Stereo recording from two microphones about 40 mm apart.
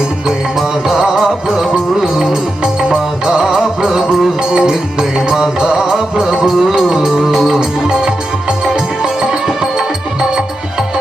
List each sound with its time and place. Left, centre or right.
0.9 s music: centre
3.8 s music: centre
4.5 s music: centre
7.9 s music: centre